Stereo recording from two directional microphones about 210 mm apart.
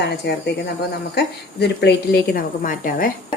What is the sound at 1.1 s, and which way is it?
A woman's voice, 55° left (ahead or behind).